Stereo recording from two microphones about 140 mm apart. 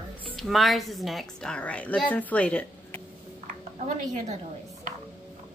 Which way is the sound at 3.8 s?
65° right (ahead or behind).